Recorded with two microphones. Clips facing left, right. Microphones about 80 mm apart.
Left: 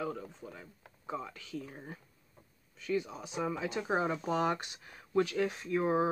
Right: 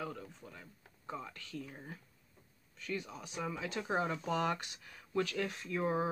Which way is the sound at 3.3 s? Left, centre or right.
Centre.